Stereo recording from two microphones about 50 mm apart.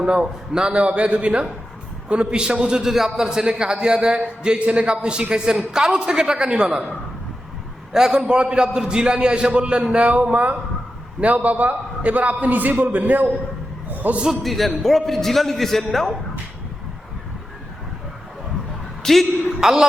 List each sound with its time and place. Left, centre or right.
0.0 s a man's voice: centre
2.8 s a man's voice: centre
7.9 s a man's voice: centre; by 14.2 s right
14.4 s a man's voice: centre
19.0 s a man's voice: centre
19.6 s a man's voice: centre